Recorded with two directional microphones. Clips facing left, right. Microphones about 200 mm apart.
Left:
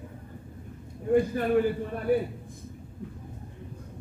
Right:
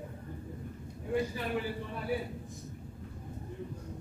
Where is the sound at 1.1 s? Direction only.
50° left (ahead or behind).